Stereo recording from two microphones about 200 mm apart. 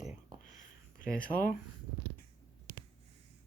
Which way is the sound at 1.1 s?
5° left (ahead or behind).